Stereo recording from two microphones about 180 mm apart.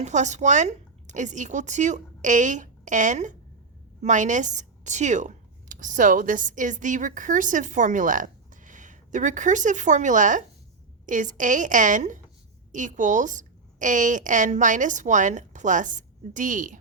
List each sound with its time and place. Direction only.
0.0 s a woman's voice: 40° right (ahead or behind)